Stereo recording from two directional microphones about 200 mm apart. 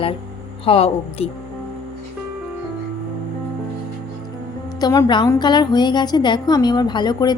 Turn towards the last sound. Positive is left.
turn(degrees=20)  # may be behind; listen again after turning